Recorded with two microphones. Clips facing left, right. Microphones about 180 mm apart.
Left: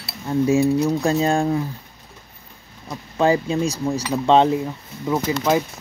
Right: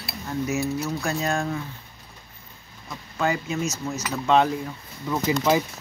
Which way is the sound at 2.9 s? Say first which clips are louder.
Left 7 dB; 30° left (ahead or behind).